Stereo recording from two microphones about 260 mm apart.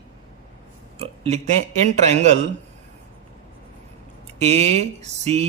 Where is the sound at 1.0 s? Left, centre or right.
Right.